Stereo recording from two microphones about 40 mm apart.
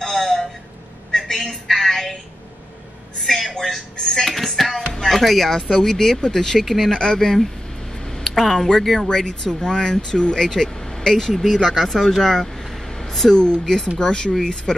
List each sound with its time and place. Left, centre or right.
0.0 s a sound: centre
3.2 s a sound: centre
4.1 s music: centre
5.0 s speech: centre
6.9 s speech: centre
8.0 s a sound: centre
8.7 s speech: centre
9.1 s speech: centre
12.1 s vehicle: centre
13.4 s speech: centre